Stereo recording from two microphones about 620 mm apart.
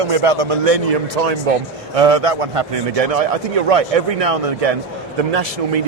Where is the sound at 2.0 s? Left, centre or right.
Right.